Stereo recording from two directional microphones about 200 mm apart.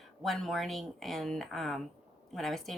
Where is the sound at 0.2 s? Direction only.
Centre (ahead or behind).